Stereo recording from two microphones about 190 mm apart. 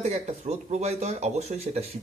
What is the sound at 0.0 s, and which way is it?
Speech, 35° right (ahead or behind).